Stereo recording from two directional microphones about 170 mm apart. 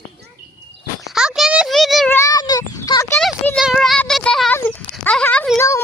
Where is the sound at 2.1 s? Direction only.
20° left (ahead or behind).